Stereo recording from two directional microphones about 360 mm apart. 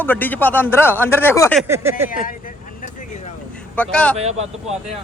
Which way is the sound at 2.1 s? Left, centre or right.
Left.